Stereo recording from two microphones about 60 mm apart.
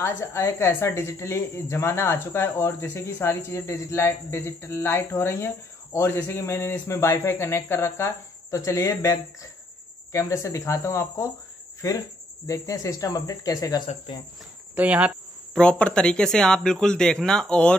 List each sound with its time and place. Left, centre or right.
0.0 s a woman's voice: left
14.8 s speech: right
15.5 s speech: centre